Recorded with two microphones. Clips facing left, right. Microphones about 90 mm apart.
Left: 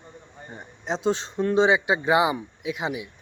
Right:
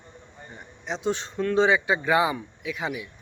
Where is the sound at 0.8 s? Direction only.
30° left (ahead or behind).